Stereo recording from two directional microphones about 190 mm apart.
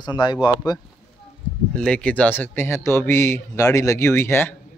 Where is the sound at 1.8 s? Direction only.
5° left (ahead or behind).